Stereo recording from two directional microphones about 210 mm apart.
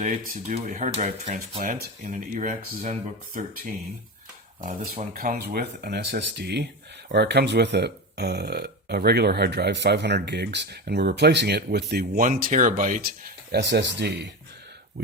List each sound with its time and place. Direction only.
0.0 s speech: 35° right (ahead or behind)
4.6 s speech: 40° right (ahead or behind); by 13.8 s 55° right (ahead or behind)